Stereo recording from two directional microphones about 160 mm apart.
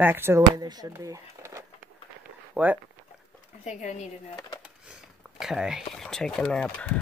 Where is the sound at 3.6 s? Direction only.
45° left (ahead or behind).